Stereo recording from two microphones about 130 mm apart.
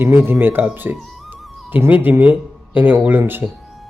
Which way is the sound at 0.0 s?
15° right (ahead or behind).